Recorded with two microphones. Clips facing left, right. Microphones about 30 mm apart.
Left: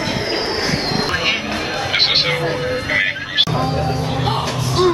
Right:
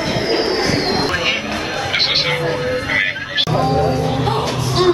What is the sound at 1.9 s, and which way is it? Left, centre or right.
Music, centre.